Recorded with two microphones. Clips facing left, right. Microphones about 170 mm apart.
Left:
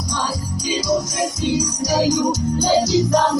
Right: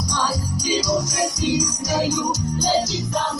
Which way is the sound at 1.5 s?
35° left (ahead or behind).